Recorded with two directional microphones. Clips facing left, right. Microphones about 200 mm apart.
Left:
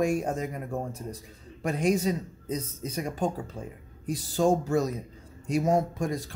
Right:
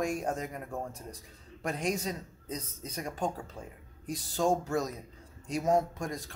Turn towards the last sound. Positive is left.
turn(degrees=5)  # may be behind; listen again after turning